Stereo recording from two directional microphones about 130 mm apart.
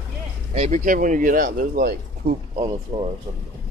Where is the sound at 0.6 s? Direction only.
70° right (ahead or behind); by 1.7 s 90° right.